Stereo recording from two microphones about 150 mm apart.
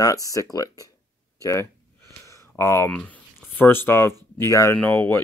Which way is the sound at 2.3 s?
20° left (ahead or behind).